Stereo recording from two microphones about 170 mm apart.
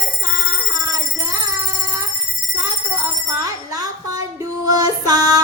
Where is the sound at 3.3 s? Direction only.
20° right (ahead or behind).